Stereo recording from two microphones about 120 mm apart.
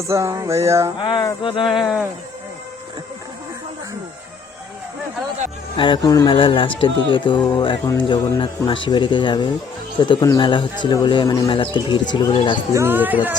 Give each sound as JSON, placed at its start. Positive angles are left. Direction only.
{"t": 0.1, "sound": "music", "side_deg": -25}
{"t": 0.9, "sound": "speech", "side_deg": 45}
{"t": 1.6, "sound": "speech", "side_deg": 0}
{"t": 5.7, "sound": "speech", "side_deg": 45}
{"t": 6.0, "sound": "speech", "side_deg": 30}
{"t": 6.3, "sound": "speech", "side_deg": 45}
{"t": 12.7, "sound": "speech", "side_deg": -20}